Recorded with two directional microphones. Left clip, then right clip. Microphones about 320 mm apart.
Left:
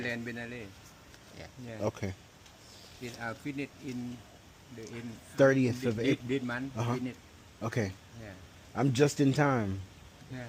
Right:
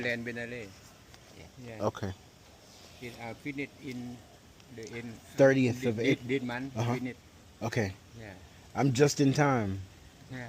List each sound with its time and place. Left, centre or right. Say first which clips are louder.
0.0 s speech: right 3 dB; centre
1.8 s speech: right 2 dB; centre
3.0 s speech: left 2 dB; centre